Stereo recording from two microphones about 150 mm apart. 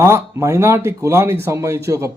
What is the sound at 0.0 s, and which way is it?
Speech, 20° right (ahead or behind).